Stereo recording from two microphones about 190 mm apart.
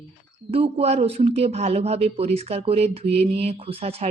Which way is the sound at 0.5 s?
30° right (ahead or behind).